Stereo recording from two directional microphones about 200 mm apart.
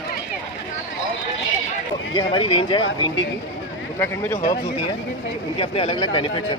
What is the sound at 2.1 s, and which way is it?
Speech, 25° left (ahead or behind).